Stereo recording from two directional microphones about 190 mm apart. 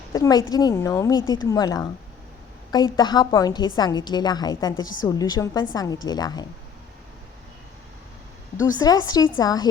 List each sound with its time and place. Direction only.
0.1 s a woman's voice: 20° left (ahead or behind)
8.5 s a woman's voice: 20° left (ahead or behind)